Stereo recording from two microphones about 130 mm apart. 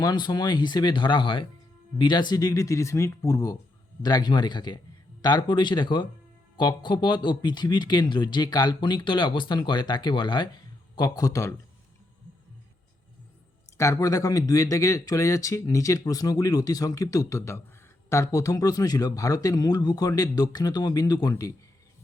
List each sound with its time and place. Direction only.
0.0 s speech: 35° left (ahead or behind)
13.7 s speech: 25° left (ahead or behind)